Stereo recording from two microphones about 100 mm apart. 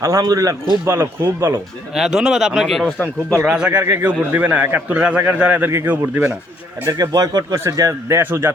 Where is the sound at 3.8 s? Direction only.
25° right (ahead or behind).